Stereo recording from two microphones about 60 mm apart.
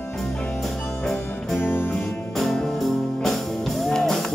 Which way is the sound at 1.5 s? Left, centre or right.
Left.